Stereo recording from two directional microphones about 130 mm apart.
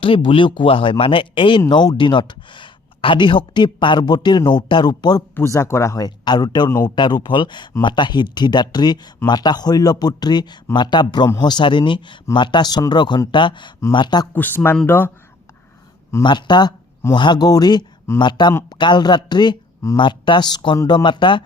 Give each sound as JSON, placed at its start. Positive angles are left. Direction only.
{"t": 0.0, "sound": "speech", "side_deg": 45}
{"t": 5.3, "sound": "speech", "side_deg": 20}
{"t": 14.3, "sound": "speech", "side_deg": 15}
{"t": 16.2, "sound": "speech", "side_deg": 35}